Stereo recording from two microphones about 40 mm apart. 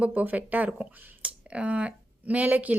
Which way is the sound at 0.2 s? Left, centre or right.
Right.